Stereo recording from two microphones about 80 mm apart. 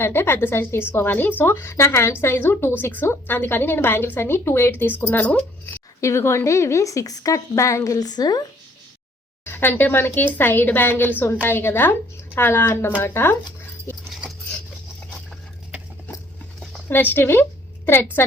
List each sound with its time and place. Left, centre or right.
0.0 s a woman's voice: left
6.0 s a woman's voice: left
7.9 s a woman's voice: left
9.4 s a woman's voice: left
16.9 s a woman's voice: left